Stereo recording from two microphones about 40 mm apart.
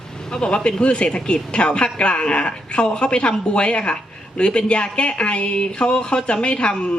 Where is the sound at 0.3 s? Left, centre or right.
Left.